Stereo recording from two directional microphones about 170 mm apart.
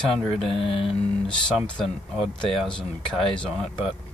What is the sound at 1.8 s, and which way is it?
Speech, centre (ahead or behind).